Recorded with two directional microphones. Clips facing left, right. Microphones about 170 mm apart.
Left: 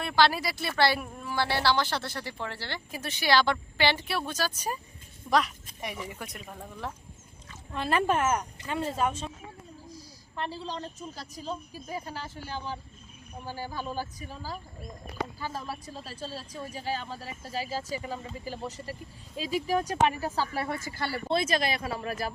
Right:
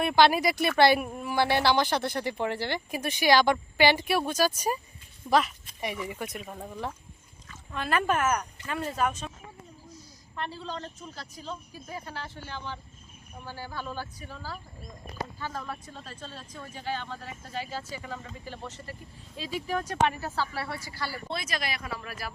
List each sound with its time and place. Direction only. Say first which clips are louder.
0.0 s speech: right 4 dB; 15° right (ahead or behind)
7.7 s speech: left 1 dB; 30° left (ahead or behind)
9.9 s a sound: left 1 dB; 30° left (ahead or behind)
11.9 s a woman's voice: left 2 dB; 15° left (ahead or behind)
12.5 s speech: left 5 dB; 35° left (ahead or behind)
13.4 s a woman's voice: left 2 dB; 15° left (ahead or behind)
16.2 s speech: left 7 dB; 35° left (ahead or behind)
18.4 s a woman's voice: left 4 dB; 5° left (ahead or behind)
20.7 s speech: left 4 dB; 50° left (ahead or behind)
21.0 s speech: left 7 dB; 25° left (ahead or behind)